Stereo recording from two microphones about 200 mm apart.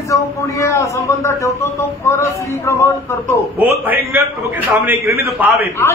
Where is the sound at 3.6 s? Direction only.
10° right (ahead or behind).